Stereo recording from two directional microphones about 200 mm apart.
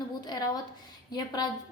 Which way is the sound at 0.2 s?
20° left (ahead or behind).